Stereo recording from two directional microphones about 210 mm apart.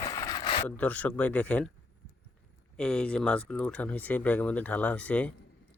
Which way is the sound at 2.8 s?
5° left (ahead or behind).